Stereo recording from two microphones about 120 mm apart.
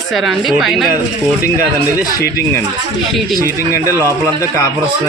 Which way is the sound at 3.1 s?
Centre (ahead or behind).